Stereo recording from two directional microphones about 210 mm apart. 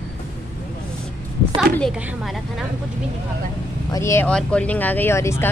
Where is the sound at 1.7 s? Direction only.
Centre (ahead or behind).